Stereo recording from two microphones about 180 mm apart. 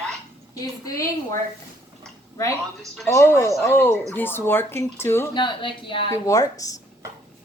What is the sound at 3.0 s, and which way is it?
Speech, 15° left (ahead or behind).